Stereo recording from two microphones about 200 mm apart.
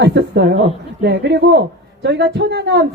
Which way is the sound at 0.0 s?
55° right (ahead or behind).